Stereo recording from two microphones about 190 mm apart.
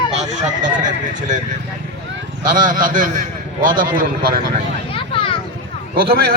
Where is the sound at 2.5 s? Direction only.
45° right (ahead or behind).